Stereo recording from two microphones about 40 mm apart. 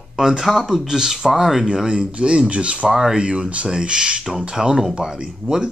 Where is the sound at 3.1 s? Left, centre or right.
Right.